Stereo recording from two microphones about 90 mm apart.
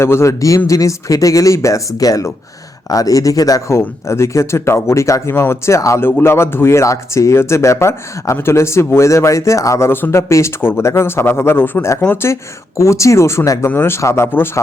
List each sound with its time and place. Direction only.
0.0 s speech: 30° left (ahead or behind)